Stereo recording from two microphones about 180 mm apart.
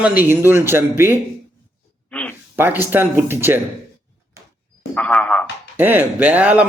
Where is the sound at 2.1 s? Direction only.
5° left (ahead or behind).